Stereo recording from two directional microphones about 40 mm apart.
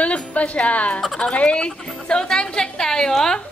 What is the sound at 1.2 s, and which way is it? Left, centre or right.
A woman's voice, left.